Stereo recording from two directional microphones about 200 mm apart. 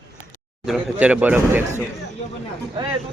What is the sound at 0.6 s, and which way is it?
Speech, 5° right (ahead or behind).